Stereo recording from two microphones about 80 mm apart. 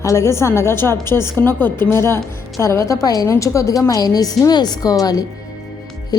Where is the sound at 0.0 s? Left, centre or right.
Left.